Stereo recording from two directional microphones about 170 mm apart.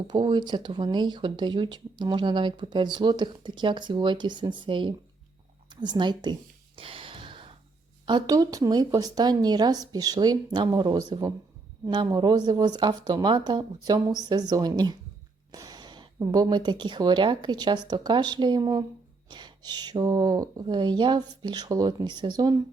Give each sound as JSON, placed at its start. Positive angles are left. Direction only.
{"t": 0.1, "sound": "speech", "side_deg": -25}
{"t": 6.7, "sound": "a sound", "side_deg": -30}
{"t": 8.0, "sound": "speech", "side_deg": -25}